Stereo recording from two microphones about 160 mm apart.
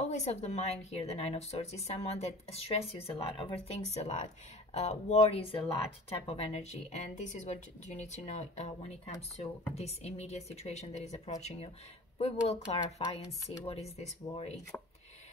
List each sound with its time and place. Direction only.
0.1 s speech: 45° left (ahead or behind)